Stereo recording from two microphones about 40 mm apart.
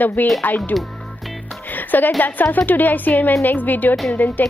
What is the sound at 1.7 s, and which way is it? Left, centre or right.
Music, left.